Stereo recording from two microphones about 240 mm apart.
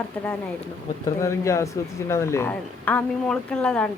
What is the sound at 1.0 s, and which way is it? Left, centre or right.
Speech, centre.